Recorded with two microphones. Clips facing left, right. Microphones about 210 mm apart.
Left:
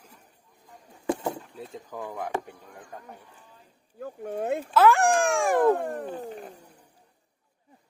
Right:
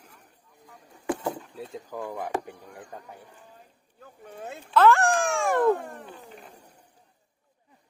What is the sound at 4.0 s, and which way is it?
Speech, 50° left (ahead or behind).